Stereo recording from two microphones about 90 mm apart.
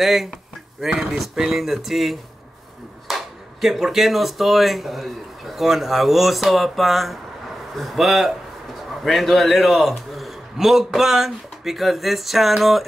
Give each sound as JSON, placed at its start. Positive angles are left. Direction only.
{"t": 0.0, "sound": "a man's voice", "side_deg": 0}